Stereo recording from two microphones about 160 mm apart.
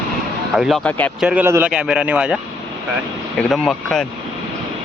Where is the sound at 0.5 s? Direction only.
Centre (ahead or behind).